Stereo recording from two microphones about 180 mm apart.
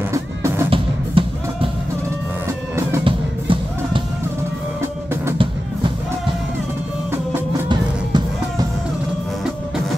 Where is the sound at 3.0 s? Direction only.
30° right (ahead or behind).